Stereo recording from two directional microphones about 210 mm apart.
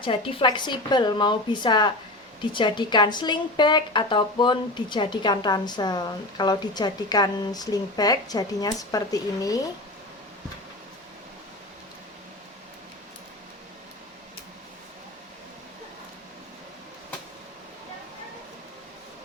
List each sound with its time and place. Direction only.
0.0 s speech: 25° left (ahead or behind)